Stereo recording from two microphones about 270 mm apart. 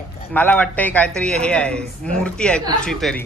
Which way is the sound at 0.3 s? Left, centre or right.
Centre.